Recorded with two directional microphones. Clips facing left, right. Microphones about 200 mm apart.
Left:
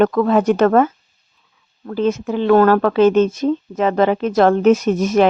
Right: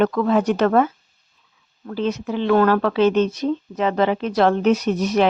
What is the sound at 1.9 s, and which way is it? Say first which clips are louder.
Speech: left 5 dB; 50° left (ahead or behind).